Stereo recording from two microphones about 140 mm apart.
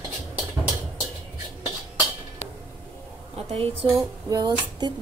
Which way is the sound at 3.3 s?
45° right (ahead or behind).